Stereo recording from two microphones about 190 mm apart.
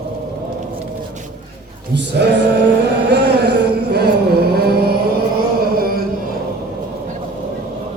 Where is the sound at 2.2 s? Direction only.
65° right (ahead or behind).